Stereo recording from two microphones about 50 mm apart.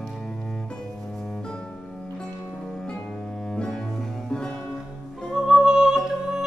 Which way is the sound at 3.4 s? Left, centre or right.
Centre.